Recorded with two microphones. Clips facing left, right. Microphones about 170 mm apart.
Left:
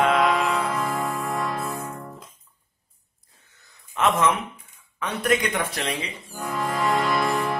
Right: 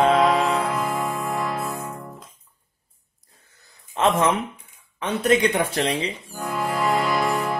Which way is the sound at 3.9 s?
30° right (ahead or behind).